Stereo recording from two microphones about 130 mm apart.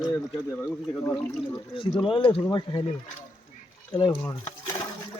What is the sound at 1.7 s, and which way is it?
A man's voice, 40° left (ahead or behind).